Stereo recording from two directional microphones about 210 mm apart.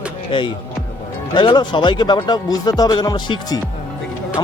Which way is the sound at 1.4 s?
20° left (ahead or behind).